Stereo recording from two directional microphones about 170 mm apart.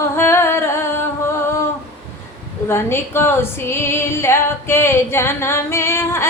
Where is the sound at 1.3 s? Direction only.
15° left (ahead or behind).